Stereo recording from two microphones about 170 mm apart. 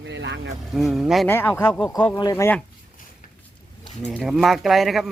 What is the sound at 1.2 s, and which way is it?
Speech, 15° left (ahead or behind).